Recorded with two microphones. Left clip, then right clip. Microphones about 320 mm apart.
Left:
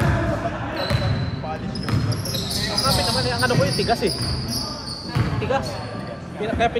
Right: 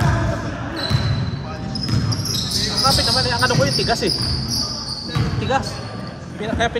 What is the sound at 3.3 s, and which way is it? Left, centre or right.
Basketball bounce, right.